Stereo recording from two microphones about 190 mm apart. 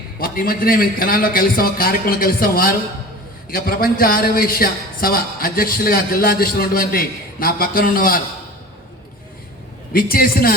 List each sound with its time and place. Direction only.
0.2 s a man's voice: 50° left (ahead or behind)
9.9 s a man's voice: 50° left (ahead or behind)